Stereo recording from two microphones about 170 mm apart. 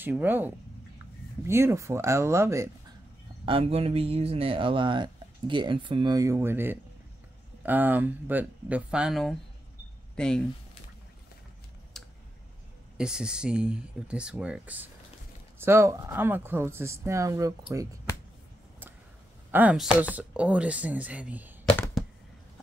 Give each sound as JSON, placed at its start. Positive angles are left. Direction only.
{"t": 0.0, "sound": "speech", "side_deg": -10}
{"t": 3.4, "sound": "speech", "side_deg": -35}
{"t": 11.9, "sound": "clicking", "side_deg": 0}
{"t": 12.9, "sound": "speech", "side_deg": -5}
{"t": 19.5, "sound": "speech", "side_deg": -10}